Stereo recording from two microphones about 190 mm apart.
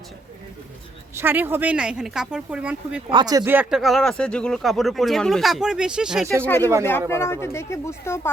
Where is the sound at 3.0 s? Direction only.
20° right (ahead or behind).